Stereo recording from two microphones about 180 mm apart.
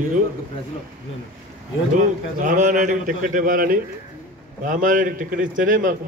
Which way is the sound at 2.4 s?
45° right (ahead or behind).